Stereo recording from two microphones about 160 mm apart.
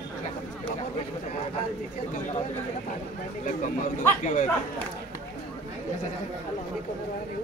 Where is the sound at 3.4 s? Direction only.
55° left (ahead or behind).